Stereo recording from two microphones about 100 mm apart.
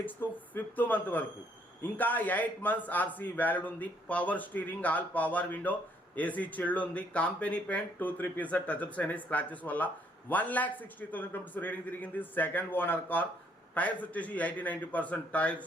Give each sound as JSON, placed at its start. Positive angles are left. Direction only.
{"t": 0.0, "sound": "speech", "side_deg": 20}